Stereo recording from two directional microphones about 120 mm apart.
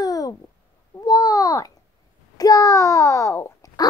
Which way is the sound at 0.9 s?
30° left (ahead or behind).